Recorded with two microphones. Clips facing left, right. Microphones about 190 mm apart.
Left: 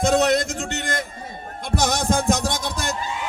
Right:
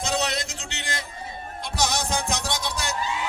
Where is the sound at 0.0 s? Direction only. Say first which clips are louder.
Left 9 dB; 50° left (ahead or behind).